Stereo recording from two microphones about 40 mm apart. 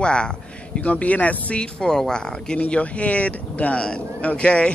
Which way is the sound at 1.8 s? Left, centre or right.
Centre.